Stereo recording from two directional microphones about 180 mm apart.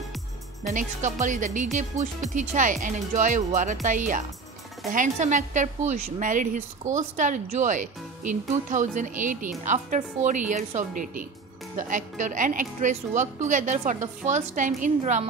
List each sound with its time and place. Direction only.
0.7 s a woman's voice: 45° right (ahead or behind)